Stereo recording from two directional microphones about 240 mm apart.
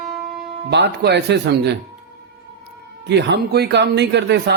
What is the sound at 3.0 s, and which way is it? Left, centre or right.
A man's voice, right.